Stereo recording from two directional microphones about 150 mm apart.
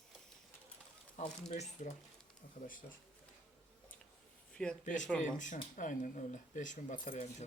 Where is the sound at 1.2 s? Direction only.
50° left (ahead or behind).